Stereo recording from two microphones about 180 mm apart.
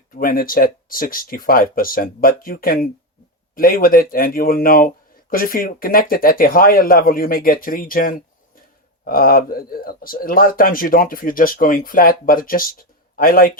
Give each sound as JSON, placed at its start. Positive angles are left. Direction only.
{"t": 0.1, "sound": "speech", "side_deg": 55}